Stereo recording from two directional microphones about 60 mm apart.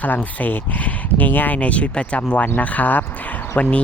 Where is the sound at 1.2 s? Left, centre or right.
Left.